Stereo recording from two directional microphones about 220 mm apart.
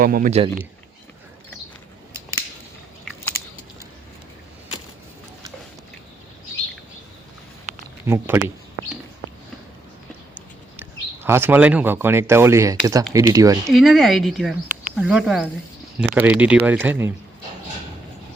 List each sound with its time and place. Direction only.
0.0 s a man's voice: 40° right (ahead or behind)
8.0 s speech: 10° right (ahead or behind)
10.8 s speech: 10° right (ahead or behind)
13.7 s speech: centre (ahead or behind)